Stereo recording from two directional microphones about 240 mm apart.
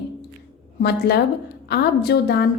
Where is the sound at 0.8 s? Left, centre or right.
Left.